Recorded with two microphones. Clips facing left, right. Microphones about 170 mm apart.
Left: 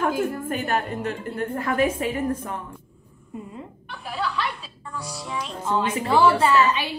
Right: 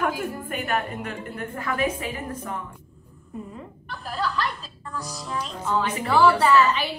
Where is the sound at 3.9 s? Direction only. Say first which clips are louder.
Even; 5° left (ahead or behind).